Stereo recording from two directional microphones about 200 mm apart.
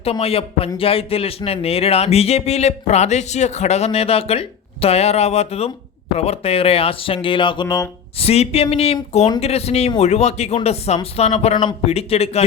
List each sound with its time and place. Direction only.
0.0 s a man's voice: 30° left (ahead or behind)